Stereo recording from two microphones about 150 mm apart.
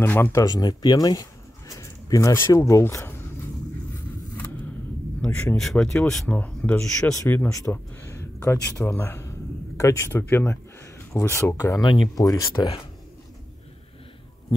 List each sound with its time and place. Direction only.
0.0 s speech: 15° left (ahead or behind)
5.2 s speech: 10° left (ahead or behind); by 12.8 s 30° left (ahead or behind)